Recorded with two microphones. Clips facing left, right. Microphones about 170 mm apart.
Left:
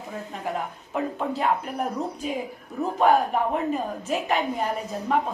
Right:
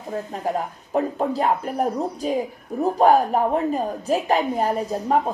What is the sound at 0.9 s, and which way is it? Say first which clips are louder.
A woman's voice: right 5 dB; 40° right (ahead or behind).